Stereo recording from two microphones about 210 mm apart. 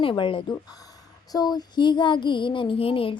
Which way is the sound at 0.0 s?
25° left (ahead or behind).